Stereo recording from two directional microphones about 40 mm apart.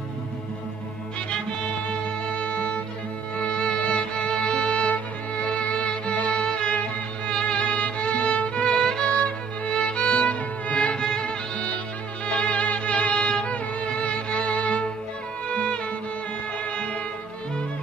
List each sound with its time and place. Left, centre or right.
1.9 s music: left
3.3 s violin: left
7.2 s music: left
7.5 s violin: left
8.5 s music: left